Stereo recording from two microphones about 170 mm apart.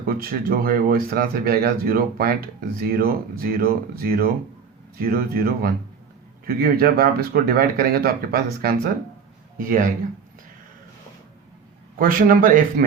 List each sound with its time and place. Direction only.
0.0 s speech: 60° right (ahead or behind)
9.6 s speech: 55° right (ahead or behind)
11.9 s speech: 55° right (ahead or behind)